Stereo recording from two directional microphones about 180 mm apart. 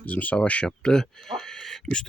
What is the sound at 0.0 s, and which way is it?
Speech, 10° left (ahead or behind).